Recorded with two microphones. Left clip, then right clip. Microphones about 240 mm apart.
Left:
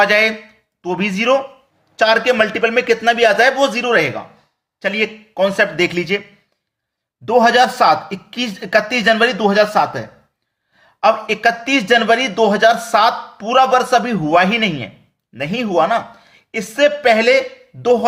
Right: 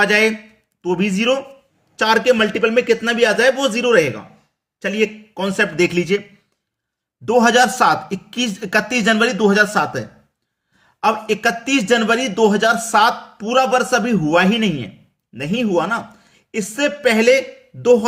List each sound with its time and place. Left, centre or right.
0.0 s a man's voice: centre
7.3 s a man's voice: right